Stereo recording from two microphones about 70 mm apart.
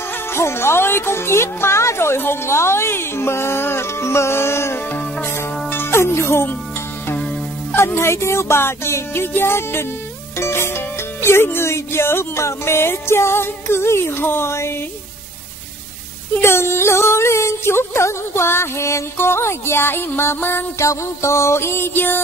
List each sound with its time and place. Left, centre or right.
0.3 s speech: left
4.9 s music: left
7.7 s speech: left
16.3 s speech: left
20.8 s speech: left